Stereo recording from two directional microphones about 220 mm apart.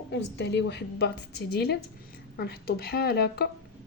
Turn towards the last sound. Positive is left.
turn(degrees=45)  # may be behind; listen again after turning